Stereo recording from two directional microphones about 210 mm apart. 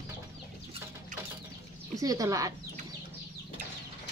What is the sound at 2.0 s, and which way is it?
Speech, 15° right (ahead or behind).